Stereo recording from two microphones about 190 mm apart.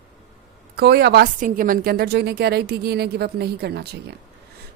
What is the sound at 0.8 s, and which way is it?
A woman's voice, 60° right (ahead or behind).